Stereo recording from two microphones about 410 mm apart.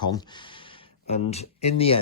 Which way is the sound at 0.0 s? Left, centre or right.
Centre.